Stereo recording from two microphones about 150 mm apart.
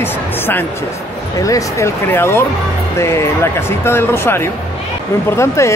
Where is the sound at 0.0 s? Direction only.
15° left (ahead or behind).